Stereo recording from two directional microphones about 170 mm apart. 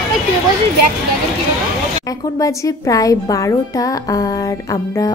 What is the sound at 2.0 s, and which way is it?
Speech, 20° left (ahead or behind).